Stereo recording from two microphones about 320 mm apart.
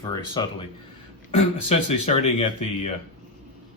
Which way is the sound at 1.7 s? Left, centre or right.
Centre.